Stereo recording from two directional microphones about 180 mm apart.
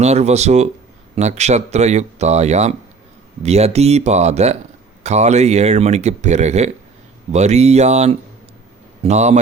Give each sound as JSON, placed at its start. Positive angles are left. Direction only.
{"t": 0.0, "sound": "speech", "side_deg": -35}